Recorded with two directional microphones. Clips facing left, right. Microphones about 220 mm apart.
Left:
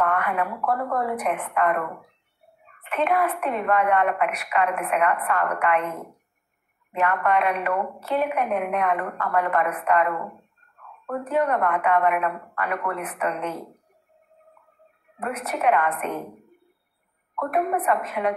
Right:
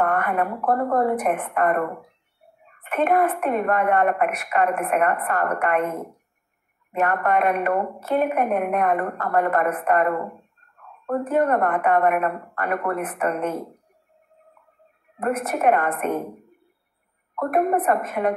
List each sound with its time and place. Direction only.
0.0 s a woman's voice: 50° right (ahead or behind)
15.1 s a woman's voice: 50° right (ahead or behind)
17.4 s a woman's voice: 50° right (ahead or behind)